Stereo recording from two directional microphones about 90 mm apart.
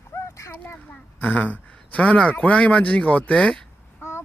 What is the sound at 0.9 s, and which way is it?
Speech, 15° left (ahead or behind).